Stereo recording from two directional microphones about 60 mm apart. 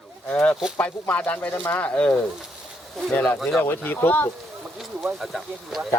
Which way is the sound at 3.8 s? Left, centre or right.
Left.